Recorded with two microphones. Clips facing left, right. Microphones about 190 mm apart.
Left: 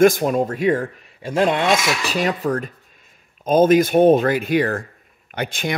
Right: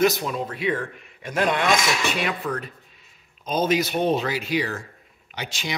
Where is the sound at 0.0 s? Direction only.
50° left (ahead or behind).